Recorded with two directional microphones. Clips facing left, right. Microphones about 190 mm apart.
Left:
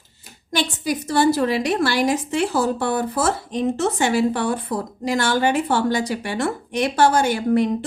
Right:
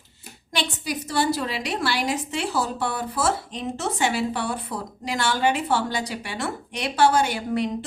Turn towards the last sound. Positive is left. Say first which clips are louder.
# left 6 dB
turn(degrees=45)  # may be behind; listen again after turning